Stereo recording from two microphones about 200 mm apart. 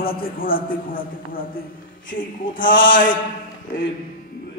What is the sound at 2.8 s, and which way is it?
Speech, 40° left (ahead or behind).